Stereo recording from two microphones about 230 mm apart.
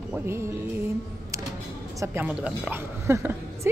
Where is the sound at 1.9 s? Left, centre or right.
Centre.